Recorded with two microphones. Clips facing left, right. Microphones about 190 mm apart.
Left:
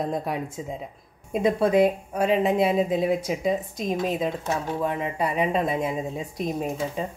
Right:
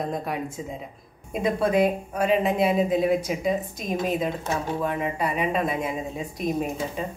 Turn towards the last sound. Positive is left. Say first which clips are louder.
# even
turn(degrees=30)  # may be behind; listen again after turning